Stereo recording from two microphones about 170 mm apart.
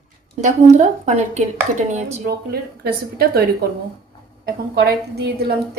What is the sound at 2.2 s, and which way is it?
A woman's voice, 65° right (ahead or behind).